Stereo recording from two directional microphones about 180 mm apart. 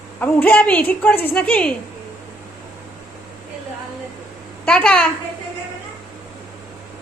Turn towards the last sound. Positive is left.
turn(degrees=5)  # may be behind; listen again after turning